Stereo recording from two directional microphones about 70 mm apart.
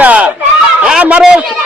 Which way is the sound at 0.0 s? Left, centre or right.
Centre.